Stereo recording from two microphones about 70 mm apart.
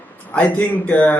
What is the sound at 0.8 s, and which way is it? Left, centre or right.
Speech, left.